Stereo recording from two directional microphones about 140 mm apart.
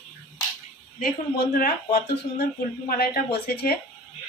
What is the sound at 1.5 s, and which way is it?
Speech, 90° left.